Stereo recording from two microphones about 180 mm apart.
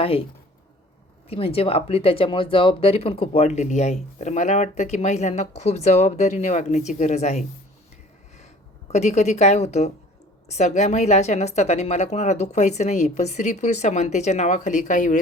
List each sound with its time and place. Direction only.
0.0 s speech: 30° left (ahead or behind)
1.3 s speech: 30° left (ahead or behind)
8.9 s speech: 40° left (ahead or behind)